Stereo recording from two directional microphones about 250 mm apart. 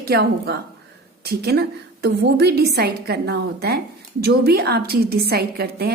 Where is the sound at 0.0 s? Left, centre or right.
Right.